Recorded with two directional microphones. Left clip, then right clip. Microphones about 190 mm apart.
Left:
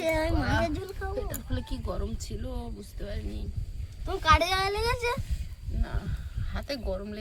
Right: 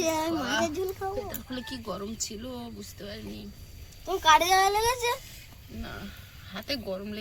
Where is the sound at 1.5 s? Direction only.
5° left (ahead or behind).